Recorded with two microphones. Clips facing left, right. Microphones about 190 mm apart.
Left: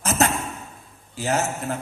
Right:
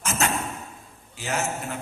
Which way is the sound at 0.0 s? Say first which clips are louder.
Left 5 dB; 35° left (ahead or behind).